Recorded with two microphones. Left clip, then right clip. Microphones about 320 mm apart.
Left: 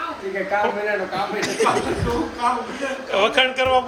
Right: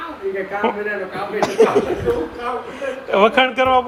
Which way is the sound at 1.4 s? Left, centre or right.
Centre.